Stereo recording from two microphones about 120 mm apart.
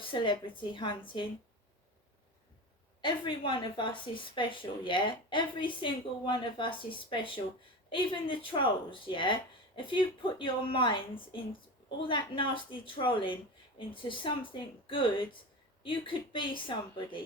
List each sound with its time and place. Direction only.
0.0 s speech: 45° left (ahead or behind)
3.0 s speech: 45° left (ahead or behind)